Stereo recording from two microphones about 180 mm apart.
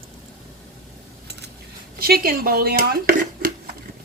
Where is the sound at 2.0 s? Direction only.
55° right (ahead or behind).